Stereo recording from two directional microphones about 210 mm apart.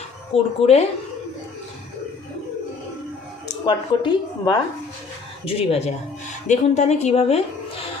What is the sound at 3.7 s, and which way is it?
A woman's voice, 20° left (ahead or behind).